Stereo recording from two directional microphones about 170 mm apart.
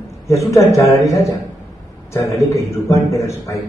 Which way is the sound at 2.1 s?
15° left (ahead or behind).